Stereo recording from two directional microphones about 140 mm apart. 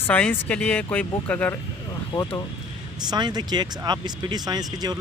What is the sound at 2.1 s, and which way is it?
Speech, 40° left (ahead or behind).